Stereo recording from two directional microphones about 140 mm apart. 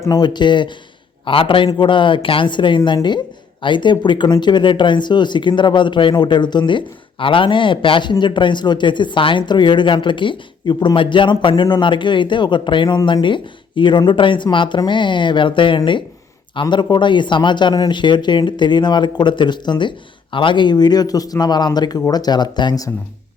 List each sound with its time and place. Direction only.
0.0 s speech: 30° left (ahead or behind)